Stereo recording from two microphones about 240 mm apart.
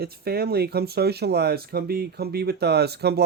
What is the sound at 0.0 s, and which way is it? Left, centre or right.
Speech, right.